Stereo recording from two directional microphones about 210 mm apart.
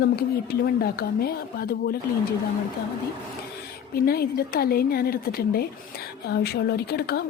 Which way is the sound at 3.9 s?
45° left (ahead or behind).